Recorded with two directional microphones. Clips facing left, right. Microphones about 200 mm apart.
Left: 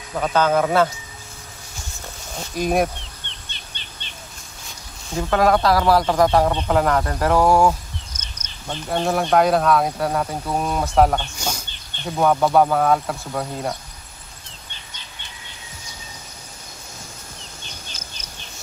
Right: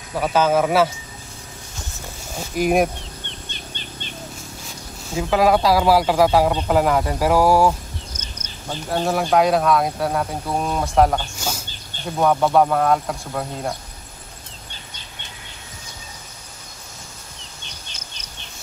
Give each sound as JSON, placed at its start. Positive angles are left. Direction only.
{"t": 0.1, "sound": "speech", "side_deg": -5}
{"t": 2.3, "sound": "speech", "side_deg": -10}
{"t": 3.3, "sound": "bird", "side_deg": -45}
{"t": 5.1, "sound": "speech", "side_deg": -5}